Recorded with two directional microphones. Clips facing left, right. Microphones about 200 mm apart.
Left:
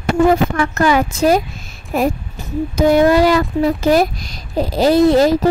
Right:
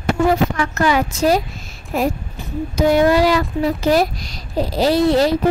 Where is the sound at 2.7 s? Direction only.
50° left (ahead or behind).